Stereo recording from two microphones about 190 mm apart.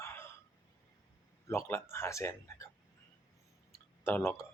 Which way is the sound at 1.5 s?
10° left (ahead or behind).